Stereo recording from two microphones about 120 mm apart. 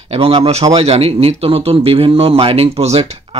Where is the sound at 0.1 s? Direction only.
55° right (ahead or behind).